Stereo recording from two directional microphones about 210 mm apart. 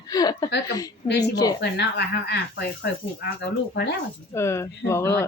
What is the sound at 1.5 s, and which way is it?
Speech, 55° left (ahead or behind).